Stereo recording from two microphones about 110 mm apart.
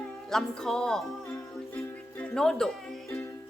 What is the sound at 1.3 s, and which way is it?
Music, 25° left (ahead or behind).